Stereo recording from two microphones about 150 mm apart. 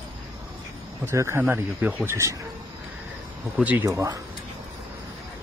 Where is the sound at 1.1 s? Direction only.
20° right (ahead or behind).